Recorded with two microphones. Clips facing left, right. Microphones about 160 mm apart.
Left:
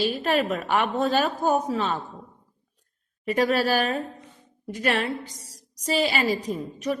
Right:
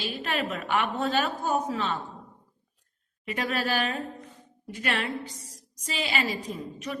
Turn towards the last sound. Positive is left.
turn(degrees=45)  # may be behind; listen again after turning